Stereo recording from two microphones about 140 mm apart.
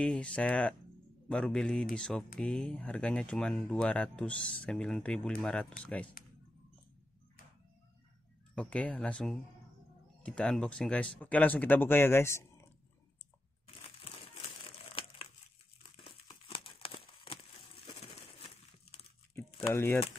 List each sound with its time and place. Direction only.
0.0 s a man's voice: 5° left (ahead or behind)
6.2 s computer keyboard: 90° left
8.5 s speech: 10° left (ahead or behind)
13.8 s crushing: 45° left (ahead or behind)
14.9 s crumpling: 45° left (ahead or behind)
19.7 s speech: 15° left (ahead or behind)